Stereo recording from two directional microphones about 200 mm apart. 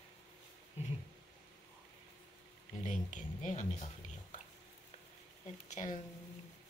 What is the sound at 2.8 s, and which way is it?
Speech, 40° left (ahead or behind).